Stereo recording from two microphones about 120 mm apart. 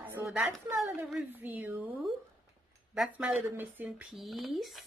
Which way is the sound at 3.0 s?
5° right (ahead or behind).